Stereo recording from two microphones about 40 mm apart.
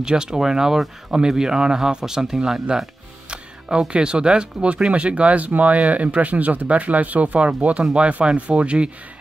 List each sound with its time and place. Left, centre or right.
0.0 s speech: centre